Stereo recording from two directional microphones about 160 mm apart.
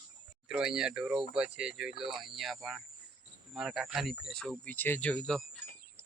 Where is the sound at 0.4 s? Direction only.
5° right (ahead or behind).